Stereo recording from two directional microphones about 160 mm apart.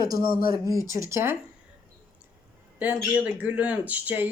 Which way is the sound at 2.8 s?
10° right (ahead or behind).